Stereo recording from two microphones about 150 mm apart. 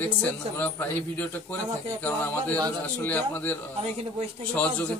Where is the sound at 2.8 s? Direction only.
10° left (ahead or behind).